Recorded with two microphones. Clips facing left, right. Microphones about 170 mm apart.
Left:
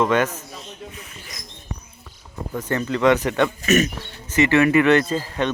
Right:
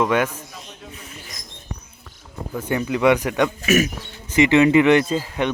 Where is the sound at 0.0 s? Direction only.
10° right (ahead or behind).